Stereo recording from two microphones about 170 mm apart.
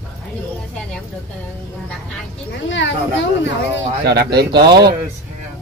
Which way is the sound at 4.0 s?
70° right (ahead or behind).